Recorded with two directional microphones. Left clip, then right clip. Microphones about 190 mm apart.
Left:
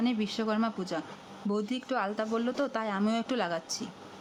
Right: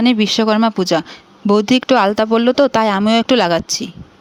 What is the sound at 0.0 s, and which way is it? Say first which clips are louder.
Speech: right 17 dB; 55° right (ahead or behind).